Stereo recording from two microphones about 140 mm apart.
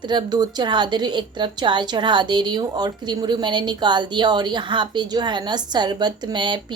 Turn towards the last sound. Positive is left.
turn(degrees=-35)  # may be behind; listen again after turning